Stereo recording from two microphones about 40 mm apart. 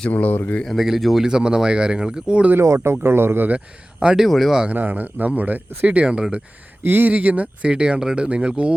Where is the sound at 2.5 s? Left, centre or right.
Right.